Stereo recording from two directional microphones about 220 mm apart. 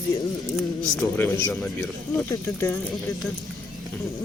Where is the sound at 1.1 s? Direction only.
5° left (ahead or behind).